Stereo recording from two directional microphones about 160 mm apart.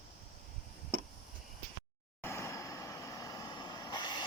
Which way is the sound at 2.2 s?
15° left (ahead or behind).